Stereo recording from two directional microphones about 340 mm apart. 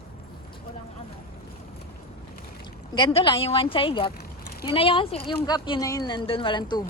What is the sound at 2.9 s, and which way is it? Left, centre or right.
Speech, centre.